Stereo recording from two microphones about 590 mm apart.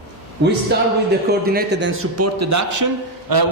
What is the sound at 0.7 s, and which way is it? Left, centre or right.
A man's voice, centre.